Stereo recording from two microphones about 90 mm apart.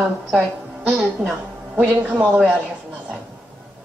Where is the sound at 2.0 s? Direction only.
15° right (ahead or behind).